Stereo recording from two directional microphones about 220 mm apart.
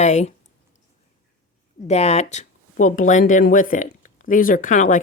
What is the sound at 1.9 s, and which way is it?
Speech, 30° left (ahead or behind).